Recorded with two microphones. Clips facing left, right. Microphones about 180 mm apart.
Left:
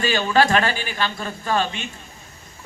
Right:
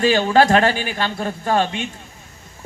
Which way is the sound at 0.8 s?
60° right (ahead or behind).